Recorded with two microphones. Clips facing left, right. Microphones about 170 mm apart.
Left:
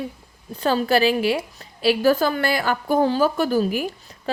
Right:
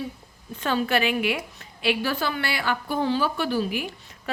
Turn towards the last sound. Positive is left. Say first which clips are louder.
# left 6 dB
turn(degrees=40)  # may be behind; listen again after turning